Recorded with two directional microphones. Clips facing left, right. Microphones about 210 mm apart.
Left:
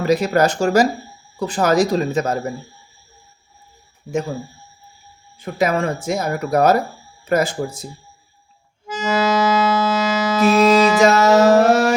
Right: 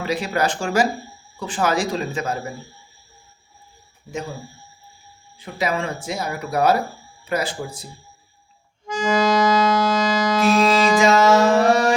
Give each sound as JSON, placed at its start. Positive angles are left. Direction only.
{"t": 0.0, "sound": "speech", "side_deg": 45}
{"t": 5.4, "sound": "speech", "side_deg": 50}
{"t": 8.9, "sound": "music", "side_deg": 5}
{"t": 11.0, "sound": "music", "side_deg": 40}